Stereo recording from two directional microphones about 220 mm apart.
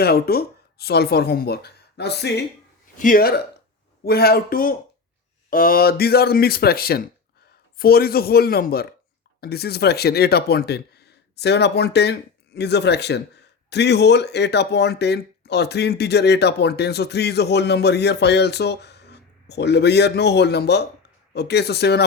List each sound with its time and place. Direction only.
0.0 s a man's voice: 45° left (ahead or behind)